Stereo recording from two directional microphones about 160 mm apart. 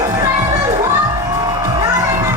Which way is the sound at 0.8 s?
15° right (ahead or behind).